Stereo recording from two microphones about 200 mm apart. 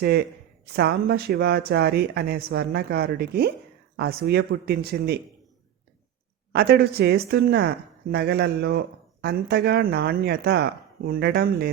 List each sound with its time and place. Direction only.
0.0 s speech: 50° right (ahead or behind)
6.5 s speech: 55° right (ahead or behind)